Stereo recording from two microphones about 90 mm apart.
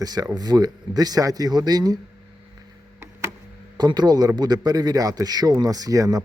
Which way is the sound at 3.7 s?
55° right (ahead or behind).